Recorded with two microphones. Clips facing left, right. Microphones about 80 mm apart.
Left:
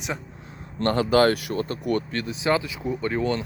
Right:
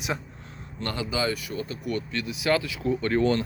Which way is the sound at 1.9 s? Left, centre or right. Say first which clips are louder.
Left 3 dB; left.